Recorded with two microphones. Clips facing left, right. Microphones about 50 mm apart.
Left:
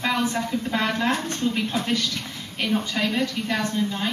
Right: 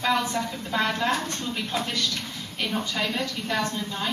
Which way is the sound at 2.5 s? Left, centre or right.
Centre.